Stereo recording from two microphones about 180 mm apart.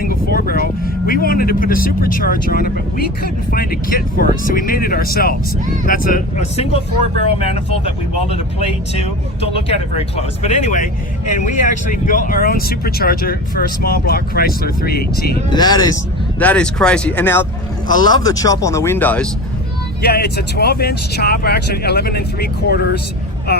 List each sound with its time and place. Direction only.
0.0 s speech: 55° left (ahead or behind); by 9.0 s 35° left (ahead or behind)
10.4 s speech: 40° left (ahead or behind); by 15.4 s 60° left (ahead or behind)
15.4 s speech: 20° left (ahead or behind)
16.4 s speech: 5° left (ahead or behind)
17.8 s speech: 25° left (ahead or behind)
20.0 s speech: 65° left (ahead or behind)